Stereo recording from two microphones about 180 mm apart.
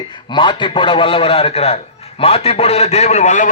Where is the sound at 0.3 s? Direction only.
25° left (ahead or behind).